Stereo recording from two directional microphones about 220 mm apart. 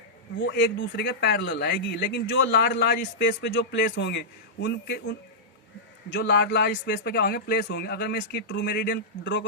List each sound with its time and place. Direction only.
0.3 s speech: 40° left (ahead or behind)
6.1 s speech: 50° left (ahead or behind)